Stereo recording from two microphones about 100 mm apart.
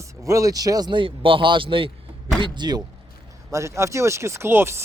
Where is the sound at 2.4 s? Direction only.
45° right (ahead or behind).